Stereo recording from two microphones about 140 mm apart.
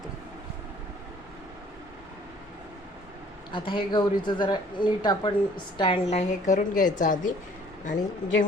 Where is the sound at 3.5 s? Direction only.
35° left (ahead or behind); by 7.3 s 65° left (ahead or behind).